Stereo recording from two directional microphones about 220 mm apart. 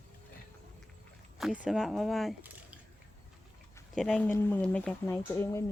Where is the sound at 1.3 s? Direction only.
Centre (ahead or behind).